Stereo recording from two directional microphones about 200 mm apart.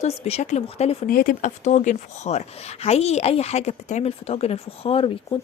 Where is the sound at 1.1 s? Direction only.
45° left (ahead or behind).